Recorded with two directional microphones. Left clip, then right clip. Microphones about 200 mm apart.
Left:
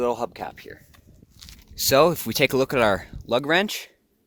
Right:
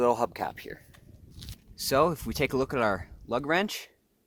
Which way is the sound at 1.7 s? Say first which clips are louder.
Left 7 dB; 20° left (ahead or behind).